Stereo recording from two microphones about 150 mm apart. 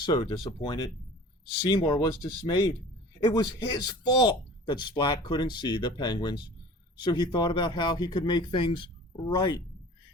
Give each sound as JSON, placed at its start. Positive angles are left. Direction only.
{"t": 0.0, "sound": "speech", "side_deg": 30}